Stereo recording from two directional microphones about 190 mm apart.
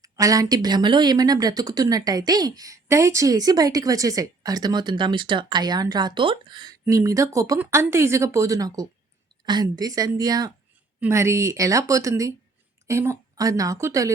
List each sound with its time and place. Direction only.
0.0 s speech: 20° right (ahead or behind)